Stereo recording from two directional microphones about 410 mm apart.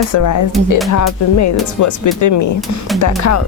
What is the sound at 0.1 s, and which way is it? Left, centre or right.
Speech, left.